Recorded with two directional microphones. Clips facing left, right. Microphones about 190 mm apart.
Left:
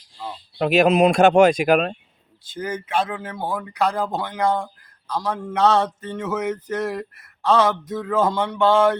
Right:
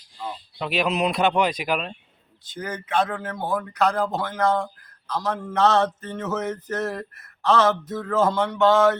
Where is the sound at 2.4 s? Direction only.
10° left (ahead or behind).